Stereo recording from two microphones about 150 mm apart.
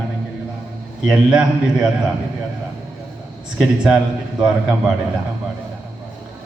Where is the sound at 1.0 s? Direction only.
5° right (ahead or behind).